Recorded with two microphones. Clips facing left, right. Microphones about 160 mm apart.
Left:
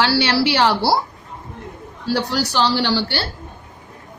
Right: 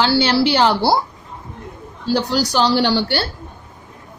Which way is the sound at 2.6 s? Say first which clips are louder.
Right 2 dB; 50° right (ahead or behind).